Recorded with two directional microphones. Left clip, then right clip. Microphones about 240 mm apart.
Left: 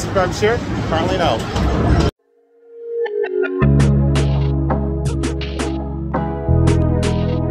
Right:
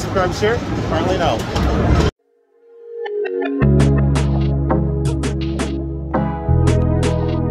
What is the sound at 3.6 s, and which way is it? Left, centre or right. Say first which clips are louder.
Music: right 1 dB; centre.